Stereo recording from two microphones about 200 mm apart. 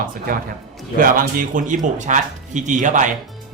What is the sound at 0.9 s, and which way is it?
Speech, 45° right (ahead or behind).